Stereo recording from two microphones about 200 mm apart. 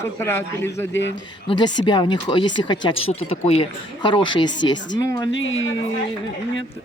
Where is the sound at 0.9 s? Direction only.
65° left (ahead or behind).